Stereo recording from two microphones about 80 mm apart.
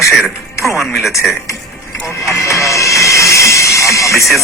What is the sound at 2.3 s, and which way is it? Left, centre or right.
Music, left.